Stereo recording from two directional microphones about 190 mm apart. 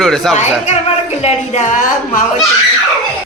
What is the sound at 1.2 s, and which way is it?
A woman's voice, 35° left (ahead or behind).